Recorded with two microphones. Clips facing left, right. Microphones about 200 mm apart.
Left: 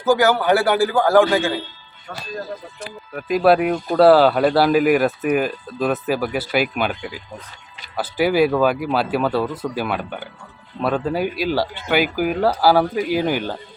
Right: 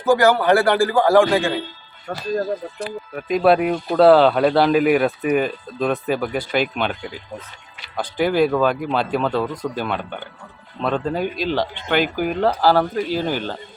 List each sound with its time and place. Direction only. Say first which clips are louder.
0.0 s speech: right 1 dB; centre (ahead or behind)
2.1 s speech: right 5 dB; 40° right (ahead or behind)
2.9 s speech: left 1 dB; centre (ahead or behind)